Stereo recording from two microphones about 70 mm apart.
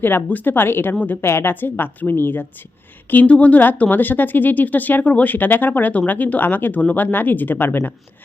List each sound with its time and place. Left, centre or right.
0.0 s speech: left